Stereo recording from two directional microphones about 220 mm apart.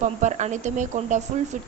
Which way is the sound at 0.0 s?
30° right (ahead or behind).